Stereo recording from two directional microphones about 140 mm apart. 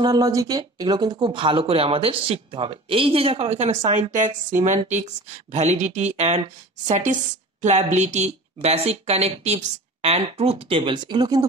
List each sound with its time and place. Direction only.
0.0 s speech: 25° right (ahead or behind)